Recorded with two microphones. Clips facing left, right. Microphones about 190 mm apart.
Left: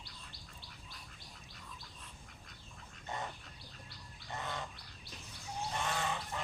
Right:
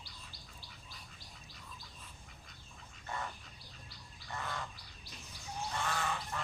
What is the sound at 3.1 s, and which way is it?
Duck, 20° left (ahead or behind).